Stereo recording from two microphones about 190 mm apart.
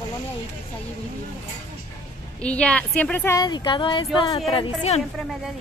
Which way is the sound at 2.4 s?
5° left (ahead or behind).